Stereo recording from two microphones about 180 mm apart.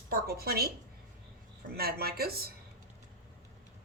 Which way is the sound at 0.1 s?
60° right (ahead or behind).